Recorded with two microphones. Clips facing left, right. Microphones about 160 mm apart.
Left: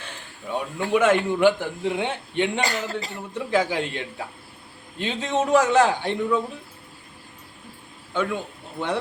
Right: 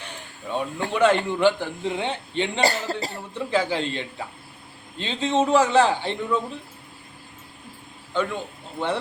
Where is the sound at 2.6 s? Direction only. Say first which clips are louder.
Right 3 dB; 40° right (ahead or behind).